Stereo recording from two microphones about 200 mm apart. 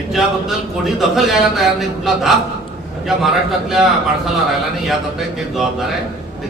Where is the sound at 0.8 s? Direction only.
Centre (ahead or behind).